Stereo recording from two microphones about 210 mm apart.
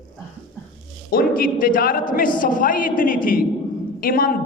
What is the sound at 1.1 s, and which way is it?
A man's voice, 45° left (ahead or behind).